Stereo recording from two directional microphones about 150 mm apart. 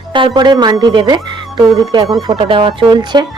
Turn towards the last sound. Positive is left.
turn(degrees=-30)  # may be behind; listen again after turning